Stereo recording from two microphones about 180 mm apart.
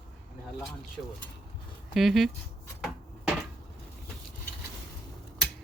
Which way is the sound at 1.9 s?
Centre (ahead or behind).